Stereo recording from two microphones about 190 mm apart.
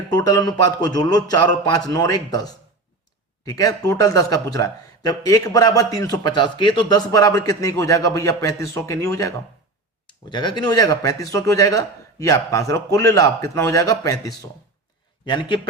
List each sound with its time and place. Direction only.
0.1 s a man's voice: 20° left (ahead or behind)